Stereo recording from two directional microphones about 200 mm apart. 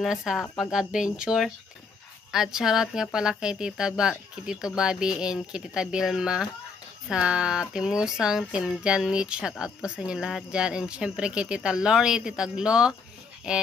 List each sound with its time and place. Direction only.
0.0 s speech: centre (ahead or behind)